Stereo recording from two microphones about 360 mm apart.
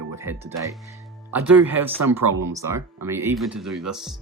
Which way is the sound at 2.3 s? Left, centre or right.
Right.